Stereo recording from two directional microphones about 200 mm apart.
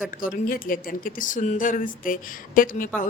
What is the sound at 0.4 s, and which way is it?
A woman's voice, 45° left (ahead or behind).